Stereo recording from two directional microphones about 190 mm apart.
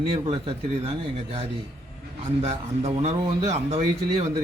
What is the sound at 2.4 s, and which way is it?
A man's voice, 35° right (ahead or behind).